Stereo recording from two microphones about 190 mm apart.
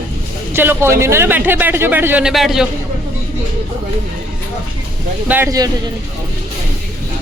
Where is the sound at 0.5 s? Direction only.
10° right (ahead or behind).